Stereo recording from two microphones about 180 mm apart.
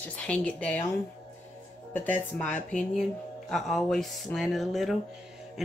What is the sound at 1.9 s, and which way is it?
A woman's voice, 10° left (ahead or behind).